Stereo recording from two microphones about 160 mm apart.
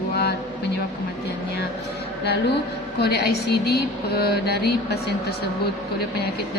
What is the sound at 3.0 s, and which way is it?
A woman's voice, 90° left.